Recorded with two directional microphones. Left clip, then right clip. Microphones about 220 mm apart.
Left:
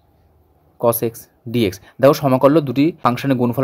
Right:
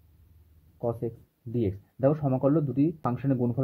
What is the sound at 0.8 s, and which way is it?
Speech, 35° left (ahead or behind).